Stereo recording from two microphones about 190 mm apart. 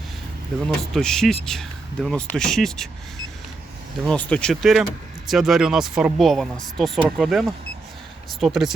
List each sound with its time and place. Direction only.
0.8 s speech: centre (ahead or behind)
4.0 s speech: 5° left (ahead or behind)